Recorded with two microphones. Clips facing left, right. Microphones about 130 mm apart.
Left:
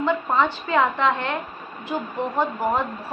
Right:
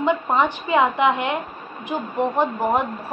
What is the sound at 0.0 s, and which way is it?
A woman's voice, 20° right (ahead or behind).